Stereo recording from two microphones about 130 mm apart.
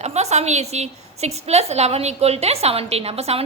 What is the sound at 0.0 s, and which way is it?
A woman's voice, 55° right (ahead or behind).